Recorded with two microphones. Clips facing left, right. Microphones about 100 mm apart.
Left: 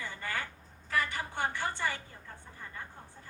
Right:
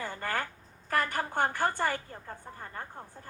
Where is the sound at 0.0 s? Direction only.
45° right (ahead or behind).